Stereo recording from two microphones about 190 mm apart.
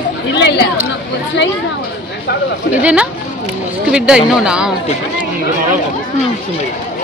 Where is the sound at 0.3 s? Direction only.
65° left (ahead or behind).